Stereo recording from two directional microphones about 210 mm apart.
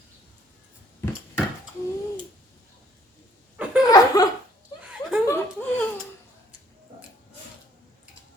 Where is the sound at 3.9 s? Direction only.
15° left (ahead or behind).